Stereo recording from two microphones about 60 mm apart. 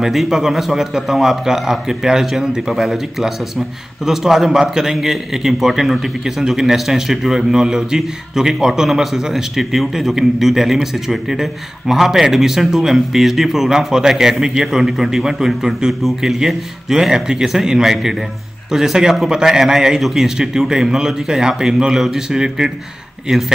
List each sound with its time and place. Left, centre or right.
0.0 s a man's voice: centre